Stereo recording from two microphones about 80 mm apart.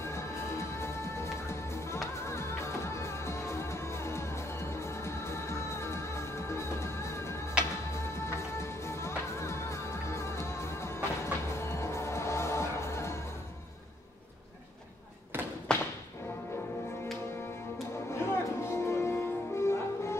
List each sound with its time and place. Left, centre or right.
0.0 s music: left
15.3 s thump: right
15.7 s tap: centre
18.1 s music: left